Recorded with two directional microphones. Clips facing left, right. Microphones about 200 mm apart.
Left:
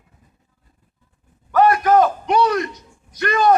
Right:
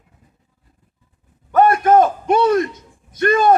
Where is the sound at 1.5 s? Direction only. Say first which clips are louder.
Right 2 dB; 25° right (ahead or behind).